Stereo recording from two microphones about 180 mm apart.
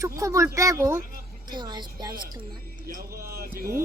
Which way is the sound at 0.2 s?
15° right (ahead or behind).